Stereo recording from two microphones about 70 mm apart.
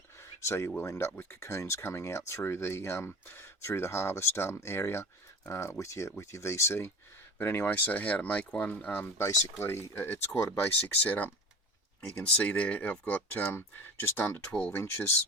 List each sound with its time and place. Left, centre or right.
0.2 s a sound: left
0.8 s speech: left
7.3 s speech: left
9.1 s speech: left
10.8 s speech: left
13.3 s speech: left